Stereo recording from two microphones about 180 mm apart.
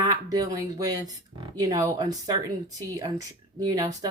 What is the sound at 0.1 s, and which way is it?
Speech, 20° right (ahead or behind).